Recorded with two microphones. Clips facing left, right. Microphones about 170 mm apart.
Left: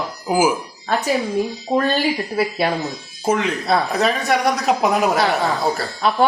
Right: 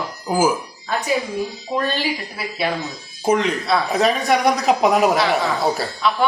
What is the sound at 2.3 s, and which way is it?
Speech, 45° left (ahead or behind).